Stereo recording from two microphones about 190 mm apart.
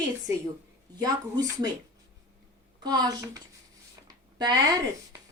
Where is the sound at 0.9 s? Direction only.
20° right (ahead or behind).